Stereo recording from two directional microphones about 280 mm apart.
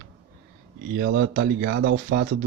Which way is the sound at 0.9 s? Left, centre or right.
Right.